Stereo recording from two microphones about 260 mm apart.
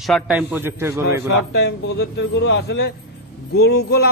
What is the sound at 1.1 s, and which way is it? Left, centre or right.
A man's voice, left.